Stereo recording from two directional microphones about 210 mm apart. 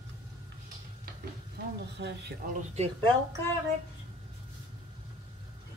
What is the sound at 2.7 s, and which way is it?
Speech, 30° right (ahead or behind).